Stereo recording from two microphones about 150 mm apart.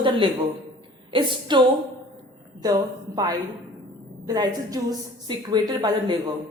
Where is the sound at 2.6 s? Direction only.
25° right (ahead or behind).